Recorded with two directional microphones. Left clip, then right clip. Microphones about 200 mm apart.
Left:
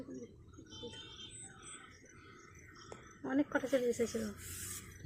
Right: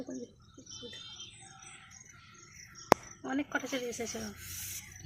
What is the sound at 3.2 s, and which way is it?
Speech, 45° right (ahead or behind).